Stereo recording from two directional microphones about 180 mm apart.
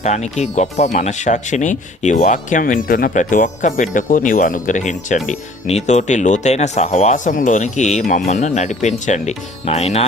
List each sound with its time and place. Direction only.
0.0 s speech: 40° left (ahead or behind)